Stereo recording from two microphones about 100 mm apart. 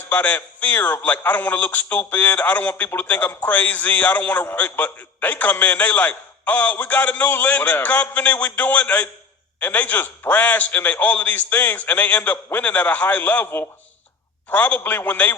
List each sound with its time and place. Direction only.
0.1 s a man's voice: 15° left (ahead or behind)